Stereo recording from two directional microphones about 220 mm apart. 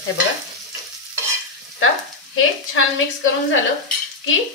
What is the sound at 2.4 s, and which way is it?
Speech, 65° left (ahead or behind).